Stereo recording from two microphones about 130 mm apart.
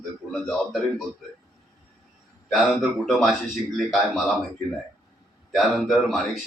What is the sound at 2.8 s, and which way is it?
Speech, centre (ahead or behind).